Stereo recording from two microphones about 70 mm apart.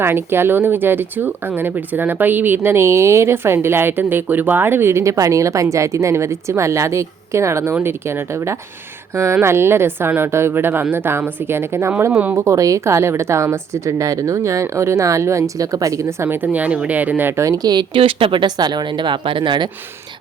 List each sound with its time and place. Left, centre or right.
0.0 s speech: right
5.1 s a woman's voice: right
9.1 s speech: right
12.5 s a woman's voice: right
16.2 s speech: right
17.3 s speech: right
18.4 s speech: right